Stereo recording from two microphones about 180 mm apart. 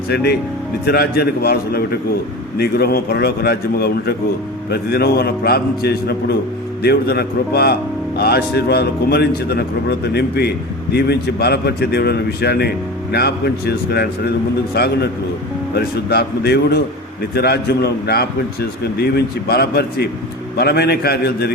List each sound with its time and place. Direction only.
0.1 s a man's voice: 65° left (ahead or behind)